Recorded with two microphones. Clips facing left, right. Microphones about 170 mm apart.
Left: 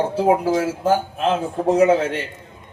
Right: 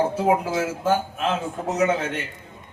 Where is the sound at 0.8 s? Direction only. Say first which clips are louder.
Left 3 dB; 35° left (ahead or behind).